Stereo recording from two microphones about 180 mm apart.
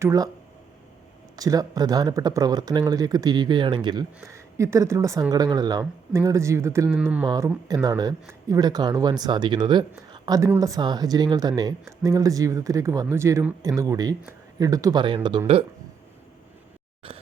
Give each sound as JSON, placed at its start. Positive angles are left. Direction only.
{"t": 0.0, "sound": "speech", "side_deg": -20}
{"t": 1.4, "sound": "speech", "side_deg": -20}